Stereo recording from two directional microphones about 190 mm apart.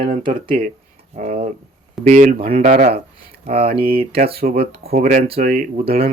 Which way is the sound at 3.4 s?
30° right (ahead or behind).